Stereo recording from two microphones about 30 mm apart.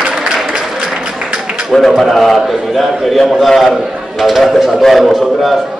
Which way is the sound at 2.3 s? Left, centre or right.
Centre.